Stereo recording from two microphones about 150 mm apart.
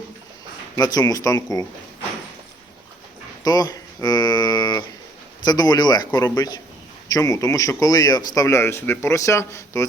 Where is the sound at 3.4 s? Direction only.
25° left (ahead or behind).